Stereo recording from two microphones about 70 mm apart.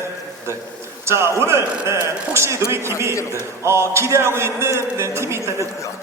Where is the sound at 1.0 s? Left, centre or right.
Right.